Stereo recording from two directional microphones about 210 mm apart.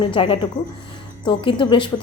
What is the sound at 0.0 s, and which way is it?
A woman's voice, 25° left (ahead or behind).